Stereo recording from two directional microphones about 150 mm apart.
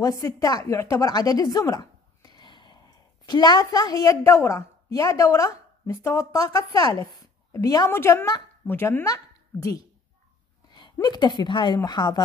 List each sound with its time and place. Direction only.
0.2 s a woman's voice: 25° left (ahead or behind)